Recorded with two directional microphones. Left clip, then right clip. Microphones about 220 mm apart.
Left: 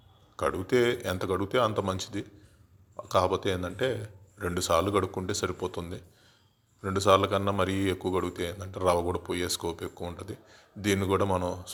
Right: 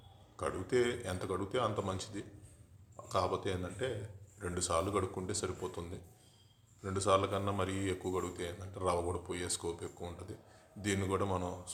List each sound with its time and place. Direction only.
0.3 s a man's voice: 40° left (ahead or behind)